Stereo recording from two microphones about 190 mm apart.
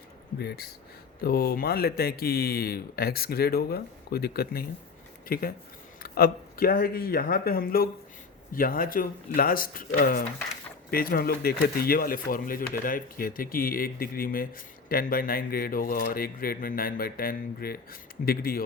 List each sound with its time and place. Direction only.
0.3 s speech: 55° left (ahead or behind)